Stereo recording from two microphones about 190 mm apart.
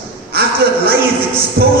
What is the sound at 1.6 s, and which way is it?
Music, 55° right (ahead or behind).